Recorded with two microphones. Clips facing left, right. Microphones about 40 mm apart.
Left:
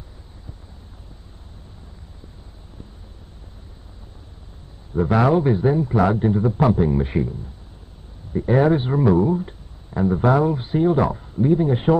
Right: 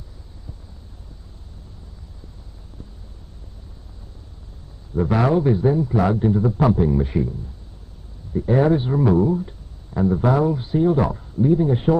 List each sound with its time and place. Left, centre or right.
5.0 s speech: left